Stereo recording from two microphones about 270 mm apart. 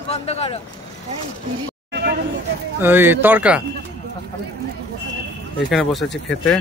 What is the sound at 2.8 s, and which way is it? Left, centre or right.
Speech, centre.